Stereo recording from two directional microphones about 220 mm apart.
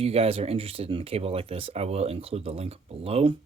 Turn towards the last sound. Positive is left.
turn(degrees=-25)  # may be behind; listen again after turning